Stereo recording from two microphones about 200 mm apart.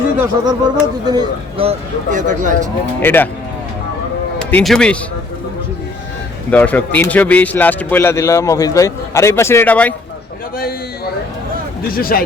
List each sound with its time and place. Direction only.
0.2 s speech: 15° right (ahead or behind); by 2.6 s 40° right (ahead or behind)
3.0 s a man's voice: 10° left (ahead or behind)
4.4 s speech: centre (ahead or behind)
6.5 s a man's voice: 10° left (ahead or behind)
10.6 s a man's voice: 50° left (ahead or behind)